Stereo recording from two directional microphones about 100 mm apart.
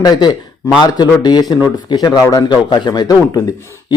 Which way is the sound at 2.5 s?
50° left (ahead or behind).